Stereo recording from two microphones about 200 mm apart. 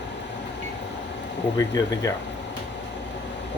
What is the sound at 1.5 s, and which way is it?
Speech, 15° left (ahead or behind).